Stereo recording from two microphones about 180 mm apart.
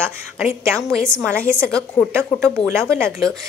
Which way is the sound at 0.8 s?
5° left (ahead or behind).